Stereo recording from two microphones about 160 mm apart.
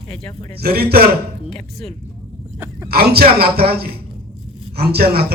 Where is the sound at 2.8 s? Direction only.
75° right (ahead or behind).